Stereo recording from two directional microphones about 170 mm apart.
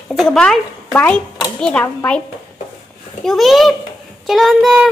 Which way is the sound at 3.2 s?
Centre (ahead or behind).